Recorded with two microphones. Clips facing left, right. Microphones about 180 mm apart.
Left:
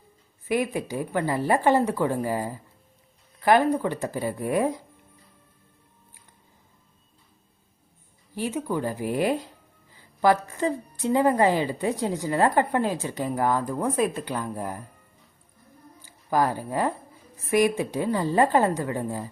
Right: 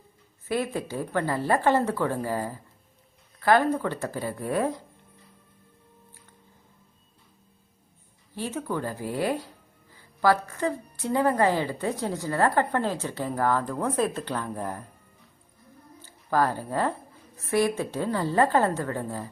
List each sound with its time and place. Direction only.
0.4 s a woman's voice: 15° left (ahead or behind)
8.4 s a woman's voice: 15° left (ahead or behind)
9.9 s music: 20° left (ahead or behind)
10.4 s a woman's voice: 20° left (ahead or behind)
16.0 s a woman's voice: 15° left (ahead or behind)